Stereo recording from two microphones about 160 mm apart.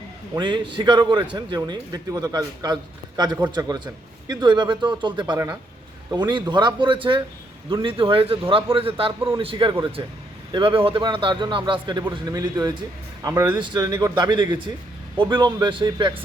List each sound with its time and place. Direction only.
0.3 s a man's voice: 30° right (ahead or behind)